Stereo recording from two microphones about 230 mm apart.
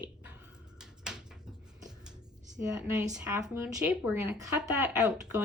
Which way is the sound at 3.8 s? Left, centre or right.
Centre.